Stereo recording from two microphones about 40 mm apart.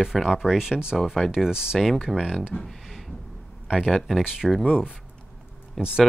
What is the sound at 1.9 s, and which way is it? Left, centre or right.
Speech, centre.